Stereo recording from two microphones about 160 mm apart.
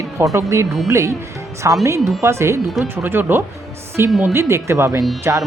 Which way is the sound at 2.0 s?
Centre (ahead or behind).